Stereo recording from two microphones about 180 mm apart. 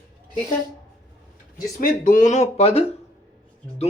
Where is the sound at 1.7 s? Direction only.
50° left (ahead or behind).